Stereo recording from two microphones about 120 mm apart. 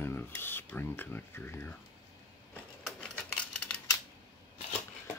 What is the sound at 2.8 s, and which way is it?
Typewriter, 5° left (ahead or behind).